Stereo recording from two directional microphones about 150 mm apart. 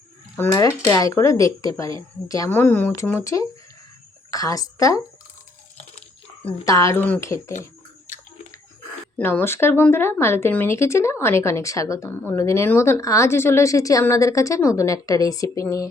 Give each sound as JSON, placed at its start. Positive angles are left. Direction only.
{"t": 0.3, "sound": "speech", "side_deg": 20}
{"t": 6.7, "sound": "speech", "side_deg": 20}
{"t": 9.1, "sound": "speech", "side_deg": 15}